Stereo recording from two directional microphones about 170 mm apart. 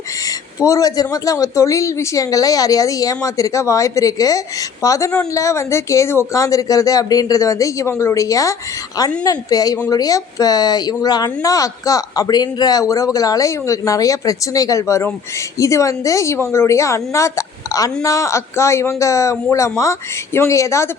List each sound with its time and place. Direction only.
0.2 s a man's voice: 20° left (ahead or behind)